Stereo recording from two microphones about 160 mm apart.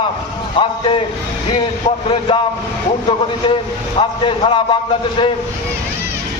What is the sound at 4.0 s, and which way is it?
Speech, 30° left (ahead or behind).